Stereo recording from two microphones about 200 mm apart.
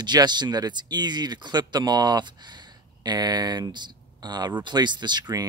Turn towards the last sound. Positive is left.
turn(degrees=-20)  # may be behind; listen again after turning